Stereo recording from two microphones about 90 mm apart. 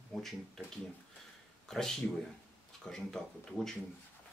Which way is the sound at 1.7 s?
5° left (ahead or behind).